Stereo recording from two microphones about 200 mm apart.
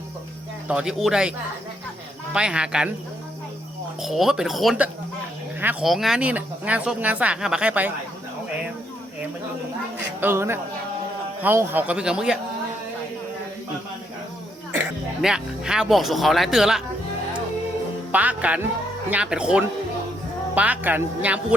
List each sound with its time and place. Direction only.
0.7 s speech: 5° right (ahead or behind)
2.3 s speech: 5° right (ahead or behind)
4.0 s speech: centre (ahead or behind)
10.2 s speech: 10° right (ahead or behind)
15.2 s speech: 5° right (ahead or behind)
18.1 s speech: 5° right (ahead or behind)